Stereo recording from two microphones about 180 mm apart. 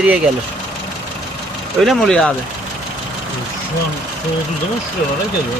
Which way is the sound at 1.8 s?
Centre (ahead or behind).